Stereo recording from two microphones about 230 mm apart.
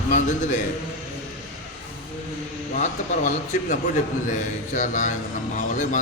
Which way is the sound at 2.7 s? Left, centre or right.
Left.